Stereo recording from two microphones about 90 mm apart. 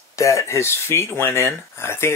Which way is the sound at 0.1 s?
35° left (ahead or behind).